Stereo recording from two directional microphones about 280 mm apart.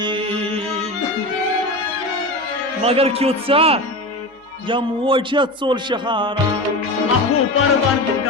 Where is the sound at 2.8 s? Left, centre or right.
Right.